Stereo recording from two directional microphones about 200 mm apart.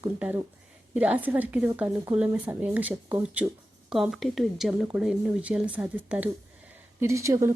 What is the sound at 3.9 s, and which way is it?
Speech, centre (ahead or behind).